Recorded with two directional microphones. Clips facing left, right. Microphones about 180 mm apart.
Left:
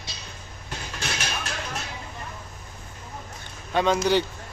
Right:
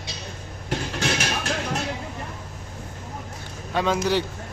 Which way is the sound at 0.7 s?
75° right (ahead or behind).